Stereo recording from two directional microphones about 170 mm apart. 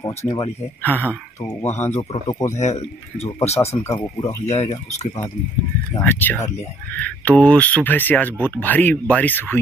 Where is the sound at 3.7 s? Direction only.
20° left (ahead or behind).